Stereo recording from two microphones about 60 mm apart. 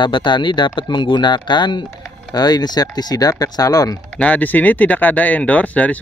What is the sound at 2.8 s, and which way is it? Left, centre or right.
Speech, left.